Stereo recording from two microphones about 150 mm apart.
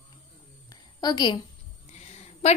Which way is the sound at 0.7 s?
25° left (ahead or behind).